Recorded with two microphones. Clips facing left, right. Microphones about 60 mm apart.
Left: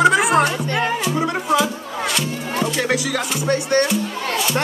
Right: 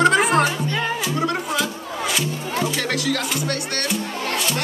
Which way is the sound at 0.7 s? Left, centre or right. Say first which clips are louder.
Left 3 dB; left.